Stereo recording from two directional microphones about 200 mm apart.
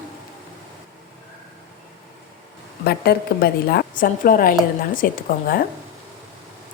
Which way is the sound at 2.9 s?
50° left (ahead or behind).